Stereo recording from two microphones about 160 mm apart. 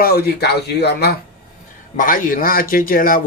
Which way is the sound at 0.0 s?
75° left (ahead or behind).